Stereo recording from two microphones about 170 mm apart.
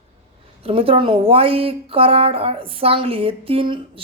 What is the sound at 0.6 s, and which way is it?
Speech, 35° right (ahead or behind).